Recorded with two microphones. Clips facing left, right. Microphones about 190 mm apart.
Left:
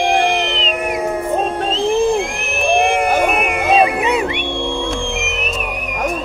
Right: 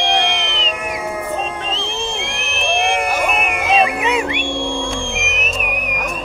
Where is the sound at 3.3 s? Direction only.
35° left (ahead or behind).